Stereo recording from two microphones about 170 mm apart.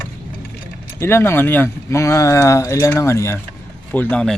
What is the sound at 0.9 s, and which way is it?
Speech, 15° left (ahead or behind).